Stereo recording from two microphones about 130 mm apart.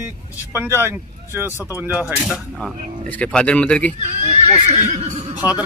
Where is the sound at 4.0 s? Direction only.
55° right (ahead or behind).